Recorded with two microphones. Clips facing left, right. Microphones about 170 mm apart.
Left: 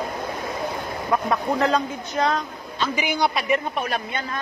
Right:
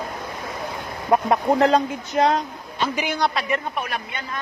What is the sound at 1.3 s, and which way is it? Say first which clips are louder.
Speech: right 4 dB; 30° right (ahead or behind).